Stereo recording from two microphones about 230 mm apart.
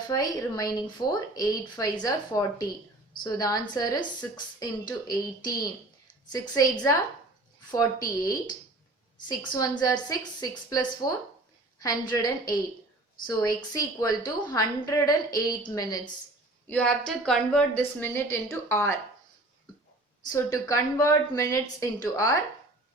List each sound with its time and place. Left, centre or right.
0.1 s a woman's voice: centre
13.7 s a woman's voice: centre
16.6 s a woman's voice: centre
20.2 s a woman's voice: centre